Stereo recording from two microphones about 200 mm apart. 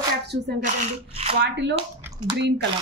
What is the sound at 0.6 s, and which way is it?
Speech, 40° right (ahead or behind).